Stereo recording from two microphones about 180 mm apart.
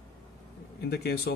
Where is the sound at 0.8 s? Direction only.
60° left (ahead or behind).